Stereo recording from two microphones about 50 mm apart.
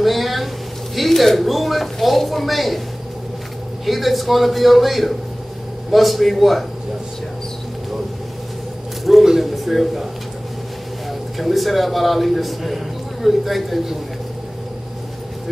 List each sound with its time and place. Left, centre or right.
0.0 s a sound: centre
0.9 s speech: centre
3.8 s speech: centre
9.0 s a man's voice: centre
11.1 s speech: centre